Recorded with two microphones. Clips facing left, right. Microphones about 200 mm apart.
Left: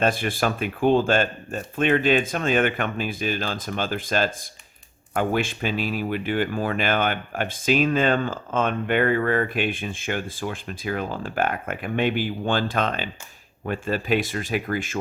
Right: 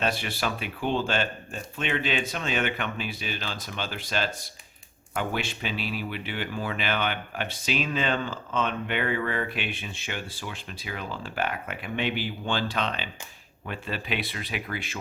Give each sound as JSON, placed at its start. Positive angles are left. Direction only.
{"t": 0.0, "sound": "speech", "side_deg": 50}